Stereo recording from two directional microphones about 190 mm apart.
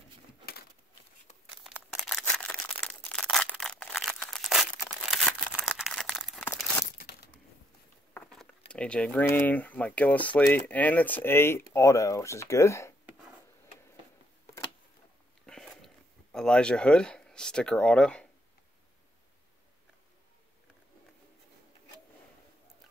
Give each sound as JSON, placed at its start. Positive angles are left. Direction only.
{"t": 1.6, "sound": "a sound", "side_deg": 0}
{"t": 5.1, "sound": "crumpling", "side_deg": 5}
{"t": 6.4, "sound": "crumpling", "side_deg": 15}
{"t": 6.8, "sound": "crumpling", "side_deg": 45}
{"t": 8.1, "sound": "speech", "side_deg": 5}
{"t": 15.4, "sound": "a sound", "side_deg": 5}